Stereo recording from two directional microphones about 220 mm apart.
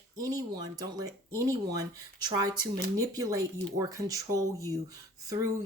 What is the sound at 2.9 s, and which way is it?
Speech, 15° right (ahead or behind).